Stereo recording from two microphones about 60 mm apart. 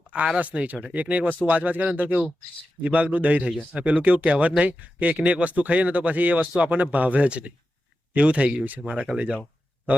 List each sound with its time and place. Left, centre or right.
0.3 s speech: right
3.5 s speech: centre
3.8 s speech: right